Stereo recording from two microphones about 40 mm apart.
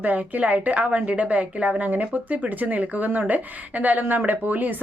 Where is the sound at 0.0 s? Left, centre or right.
Right.